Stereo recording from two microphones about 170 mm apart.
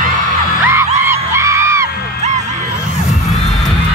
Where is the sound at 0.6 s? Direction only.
15° right (ahead or behind).